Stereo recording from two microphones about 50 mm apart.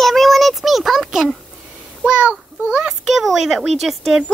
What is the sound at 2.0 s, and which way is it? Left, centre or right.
Child singing, right.